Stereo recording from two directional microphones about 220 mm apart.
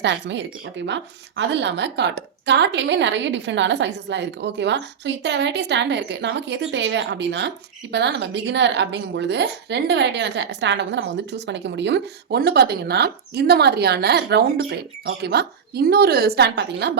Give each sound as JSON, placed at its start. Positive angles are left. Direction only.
{"t": 0.0, "sound": "a woman's voice", "side_deg": -55}